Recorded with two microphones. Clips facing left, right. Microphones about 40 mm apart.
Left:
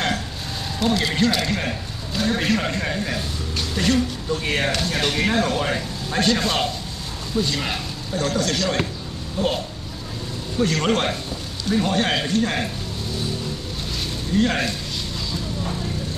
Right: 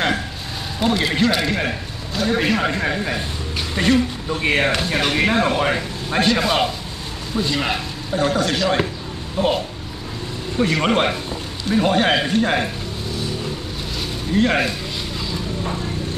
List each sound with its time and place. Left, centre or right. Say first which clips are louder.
0.7 s a man's voice: right 2 dB; centre
10.6 s a man's voice: right 3 dB; centre
14.3 s a man's voice: right 3 dB; centre